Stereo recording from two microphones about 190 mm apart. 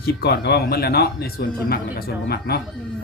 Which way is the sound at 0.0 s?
55° left (ahead or behind).